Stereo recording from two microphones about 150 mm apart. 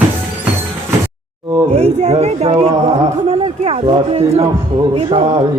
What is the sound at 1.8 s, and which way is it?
Speech, 45° right (ahead or behind).